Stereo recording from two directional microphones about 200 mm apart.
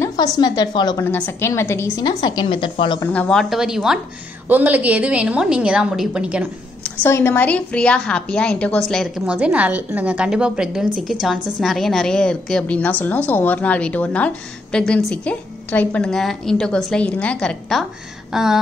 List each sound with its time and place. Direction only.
0.0 s a woman's voice: 20° left (ahead or behind)
3.0 s a woman's voice: 5° left (ahead or behind)
6.8 s a woman's voice: 10° left (ahead or behind)